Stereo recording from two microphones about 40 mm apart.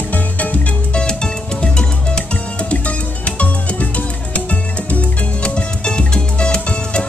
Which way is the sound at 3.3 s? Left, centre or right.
Left.